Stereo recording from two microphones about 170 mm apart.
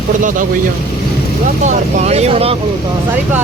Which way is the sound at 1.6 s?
40° right (ahead or behind).